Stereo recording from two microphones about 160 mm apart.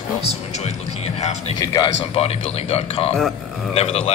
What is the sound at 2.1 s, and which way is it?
Speech, 40° left (ahead or behind).